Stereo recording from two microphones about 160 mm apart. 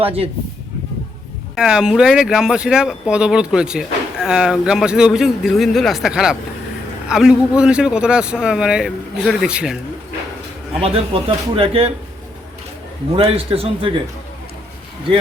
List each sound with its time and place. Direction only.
0.0 s speech: 35° right (ahead or behind)
1.5 s speech: 5° right (ahead or behind)
10.8 s speech: 40° right (ahead or behind)
13.1 s speech: 35° right (ahead or behind)